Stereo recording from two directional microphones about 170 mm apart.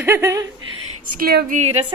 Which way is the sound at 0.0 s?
15° right (ahead or behind).